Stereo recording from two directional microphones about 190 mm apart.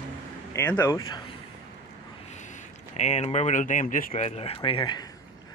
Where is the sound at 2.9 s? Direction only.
35° left (ahead or behind).